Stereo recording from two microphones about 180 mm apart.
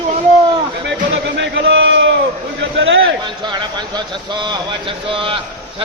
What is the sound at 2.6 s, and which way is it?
Speech, 90° right.